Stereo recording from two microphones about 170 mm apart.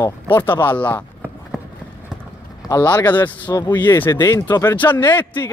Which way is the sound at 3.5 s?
25° left (ahead or behind).